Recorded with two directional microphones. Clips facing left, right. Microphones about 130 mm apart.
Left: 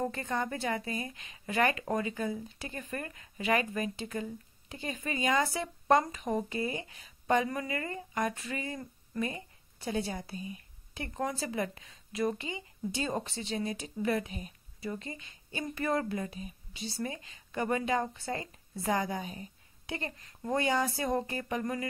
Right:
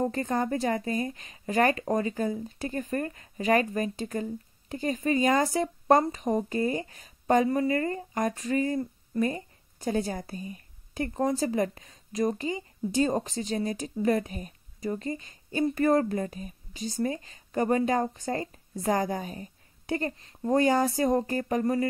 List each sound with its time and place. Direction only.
0.0 s a woman's voice: 40° right (ahead or behind)